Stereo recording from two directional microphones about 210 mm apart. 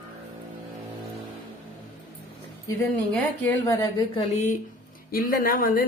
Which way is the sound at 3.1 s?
15° left (ahead or behind).